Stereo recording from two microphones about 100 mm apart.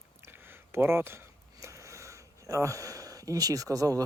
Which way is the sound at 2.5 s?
30° right (ahead or behind).